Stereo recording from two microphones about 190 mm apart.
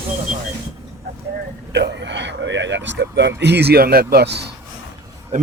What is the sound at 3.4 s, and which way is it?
Speech, 60° right (ahead or behind).